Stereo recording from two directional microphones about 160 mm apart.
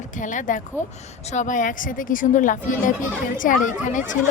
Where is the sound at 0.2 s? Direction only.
55° left (ahead or behind).